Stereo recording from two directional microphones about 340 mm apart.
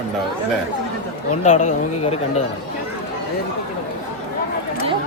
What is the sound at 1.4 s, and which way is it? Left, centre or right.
Speech, centre.